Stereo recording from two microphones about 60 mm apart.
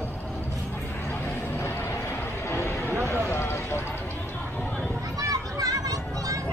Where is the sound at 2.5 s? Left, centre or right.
Left.